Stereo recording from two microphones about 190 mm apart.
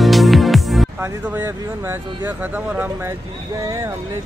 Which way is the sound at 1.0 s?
10° right (ahead or behind).